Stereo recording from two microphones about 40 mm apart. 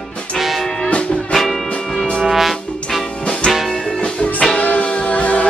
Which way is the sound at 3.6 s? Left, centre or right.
Centre.